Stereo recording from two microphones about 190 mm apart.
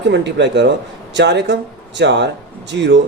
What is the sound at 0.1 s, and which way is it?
A man's voice, 65° right (ahead or behind).